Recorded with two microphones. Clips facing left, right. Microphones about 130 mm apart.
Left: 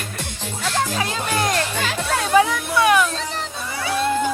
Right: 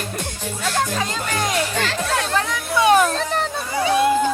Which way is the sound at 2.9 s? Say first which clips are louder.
Right 3 dB; 50° right (ahead or behind).